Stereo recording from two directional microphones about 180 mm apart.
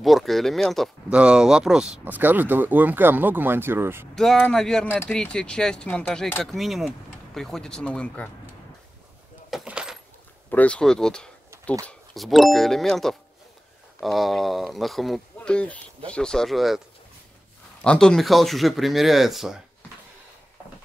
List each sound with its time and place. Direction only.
0.0 s speech: centre (ahead or behind)
4.1 s speech: centre (ahead or behind)
9.5 s keys jangling: 5° right (ahead or behind)
10.5 s speech: 5° left (ahead or behind)
17.8 s speech: 5° left (ahead or behind)